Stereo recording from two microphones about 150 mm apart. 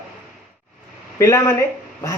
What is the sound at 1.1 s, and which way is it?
Speech, 20° left (ahead or behind).